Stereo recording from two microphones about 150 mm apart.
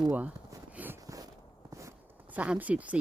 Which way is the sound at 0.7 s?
10° right (ahead or behind).